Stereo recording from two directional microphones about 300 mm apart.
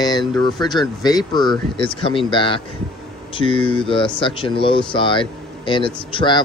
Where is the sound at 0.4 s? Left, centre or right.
Centre.